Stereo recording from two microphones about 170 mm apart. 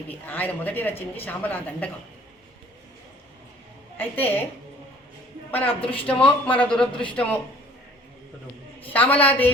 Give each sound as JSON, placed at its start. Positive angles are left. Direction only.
{"t": 0.1, "sound": "speech", "side_deg": 10}
{"t": 3.9, "sound": "speech", "side_deg": 10}
{"t": 5.5, "sound": "a man's voice", "side_deg": 10}
{"t": 8.9, "sound": "speech", "side_deg": 10}